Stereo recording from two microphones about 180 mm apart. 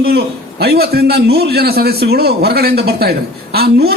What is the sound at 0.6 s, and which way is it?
A man's voice, 60° right (ahead or behind).